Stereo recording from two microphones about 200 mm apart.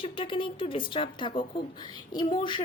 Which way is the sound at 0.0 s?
25° left (ahead or behind).